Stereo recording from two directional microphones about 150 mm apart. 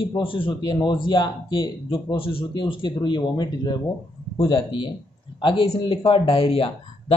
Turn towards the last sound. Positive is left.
turn(degrees=40)  # may be behind; listen again after turning